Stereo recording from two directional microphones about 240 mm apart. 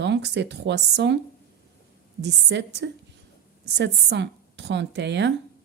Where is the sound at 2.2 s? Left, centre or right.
Right.